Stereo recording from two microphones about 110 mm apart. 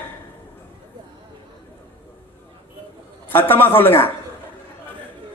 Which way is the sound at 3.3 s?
20° left (ahead or behind).